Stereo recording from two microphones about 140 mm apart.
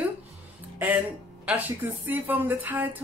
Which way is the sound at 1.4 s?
10° right (ahead or behind).